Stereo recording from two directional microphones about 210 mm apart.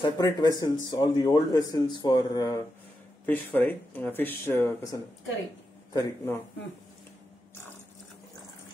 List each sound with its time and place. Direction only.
0.0 s speech: 15° left (ahead or behind)